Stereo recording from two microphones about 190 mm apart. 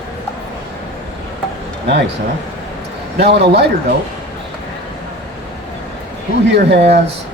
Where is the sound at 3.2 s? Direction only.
60° right (ahead or behind).